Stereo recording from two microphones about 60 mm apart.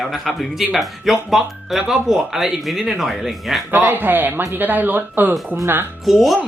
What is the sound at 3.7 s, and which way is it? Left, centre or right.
Speech, right.